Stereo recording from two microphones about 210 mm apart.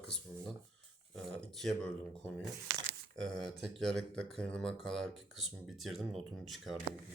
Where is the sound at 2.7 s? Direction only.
70° right (ahead or behind).